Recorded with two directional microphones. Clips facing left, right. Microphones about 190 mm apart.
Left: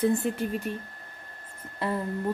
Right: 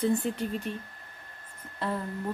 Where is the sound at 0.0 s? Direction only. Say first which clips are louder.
Left 2 dB; 5° left (ahead or behind).